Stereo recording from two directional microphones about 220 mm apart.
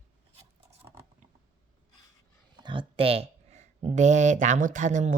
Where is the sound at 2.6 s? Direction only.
25° right (ahead or behind).